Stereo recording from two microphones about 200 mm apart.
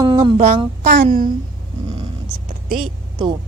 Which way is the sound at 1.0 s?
45° right (ahead or behind).